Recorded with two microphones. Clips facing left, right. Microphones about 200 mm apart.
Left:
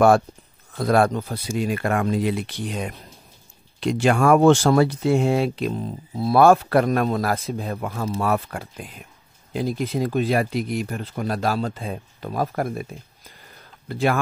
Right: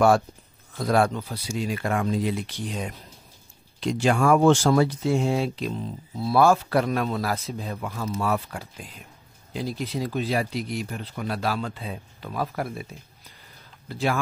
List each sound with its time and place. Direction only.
0.7 s speech: 55° left (ahead or behind)